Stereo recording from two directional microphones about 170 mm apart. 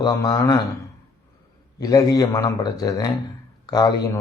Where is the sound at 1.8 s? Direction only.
20° left (ahead or behind).